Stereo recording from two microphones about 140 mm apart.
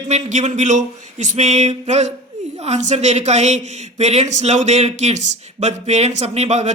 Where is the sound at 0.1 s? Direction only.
60° right (ahead or behind).